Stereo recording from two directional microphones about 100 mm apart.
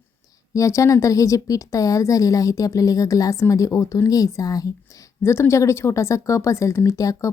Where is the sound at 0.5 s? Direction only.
35° left (ahead or behind).